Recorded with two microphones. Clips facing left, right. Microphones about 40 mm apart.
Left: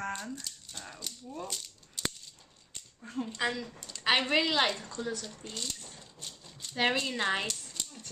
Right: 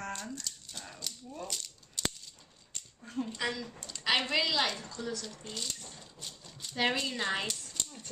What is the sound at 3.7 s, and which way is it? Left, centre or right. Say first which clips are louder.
Speech: right 1 dB; centre.